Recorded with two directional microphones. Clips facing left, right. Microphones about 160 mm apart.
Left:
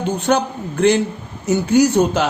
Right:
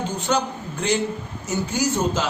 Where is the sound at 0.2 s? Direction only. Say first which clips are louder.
Left 4 dB; 60° left (ahead or behind).